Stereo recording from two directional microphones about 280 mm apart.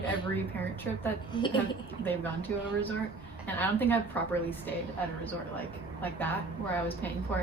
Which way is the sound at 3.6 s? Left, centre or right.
Centre.